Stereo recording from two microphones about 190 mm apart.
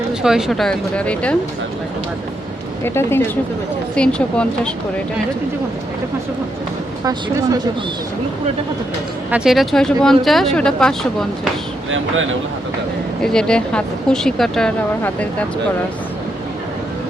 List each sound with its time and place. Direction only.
0.1 s speech: 5° right (ahead or behind)
2.8 s speech: 10° left (ahead or behind)
7.0 s speech: 20° right (ahead or behind)
9.3 s speech: 5° right (ahead or behind)
13.2 s speech: 5° left (ahead or behind)